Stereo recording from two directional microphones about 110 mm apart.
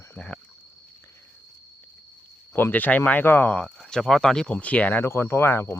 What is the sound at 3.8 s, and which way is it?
Speech, 5° left (ahead or behind).